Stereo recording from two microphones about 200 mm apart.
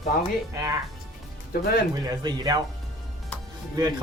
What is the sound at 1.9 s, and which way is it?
Speech, 20° right (ahead or behind).